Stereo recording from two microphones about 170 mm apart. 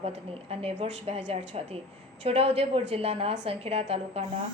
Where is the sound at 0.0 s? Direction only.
35° right (ahead or behind).